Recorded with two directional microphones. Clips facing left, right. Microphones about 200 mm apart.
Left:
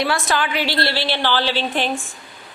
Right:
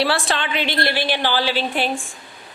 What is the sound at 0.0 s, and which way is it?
A woman's voice, 30° right (ahead or behind).